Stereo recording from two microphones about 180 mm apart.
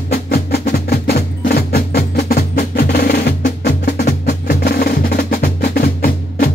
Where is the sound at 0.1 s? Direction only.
60° left (ahead or behind).